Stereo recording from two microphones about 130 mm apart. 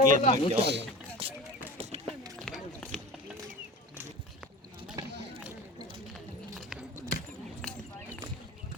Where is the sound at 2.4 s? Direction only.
5° left (ahead or behind).